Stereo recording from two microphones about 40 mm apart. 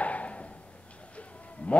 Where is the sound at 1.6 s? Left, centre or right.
Left.